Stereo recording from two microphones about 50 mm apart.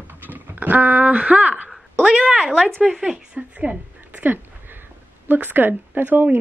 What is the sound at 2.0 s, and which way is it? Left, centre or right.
Speech, centre.